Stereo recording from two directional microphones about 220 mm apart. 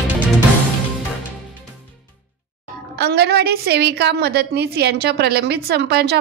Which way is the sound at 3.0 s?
50° right (ahead or behind).